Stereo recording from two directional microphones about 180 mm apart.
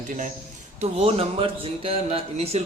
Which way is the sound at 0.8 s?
35° right (ahead or behind).